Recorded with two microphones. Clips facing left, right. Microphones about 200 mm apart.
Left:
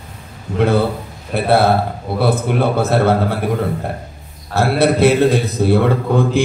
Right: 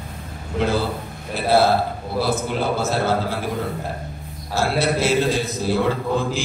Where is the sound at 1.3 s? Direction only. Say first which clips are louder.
Left 3 dB; 60° left (ahead or behind).